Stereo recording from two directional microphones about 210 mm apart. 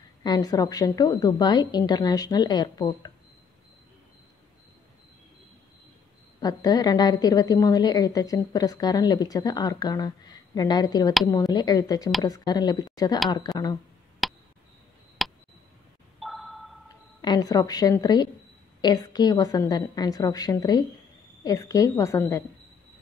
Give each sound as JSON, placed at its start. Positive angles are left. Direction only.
{"t": 0.2, "sound": "a woman's voice", "side_deg": 20}
{"t": 6.4, "sound": "a woman's voice", "side_deg": 20}
{"t": 14.2, "sound": "a sound", "side_deg": 0}
{"t": 17.2, "sound": "a woman's voice", "side_deg": 20}